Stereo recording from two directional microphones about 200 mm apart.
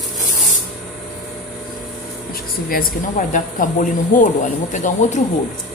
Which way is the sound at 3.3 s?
40° left (ahead or behind).